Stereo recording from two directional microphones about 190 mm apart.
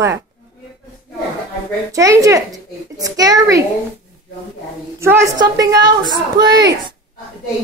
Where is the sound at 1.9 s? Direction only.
15° right (ahead or behind).